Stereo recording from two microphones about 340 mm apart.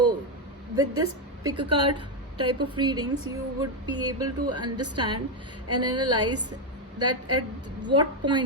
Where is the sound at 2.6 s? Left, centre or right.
Centre.